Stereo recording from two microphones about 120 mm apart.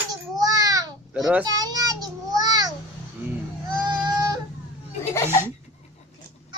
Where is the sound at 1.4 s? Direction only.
30° right (ahead or behind).